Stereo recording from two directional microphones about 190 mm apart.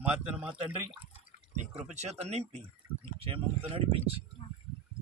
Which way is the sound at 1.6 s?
35° right (ahead or behind).